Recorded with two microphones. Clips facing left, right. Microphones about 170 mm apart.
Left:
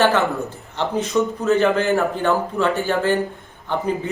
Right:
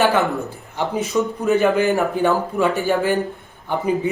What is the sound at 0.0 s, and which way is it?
Speech, 15° right (ahead or behind).